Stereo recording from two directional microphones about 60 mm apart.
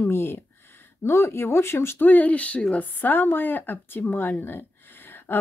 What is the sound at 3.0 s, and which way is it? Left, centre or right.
Speech, left.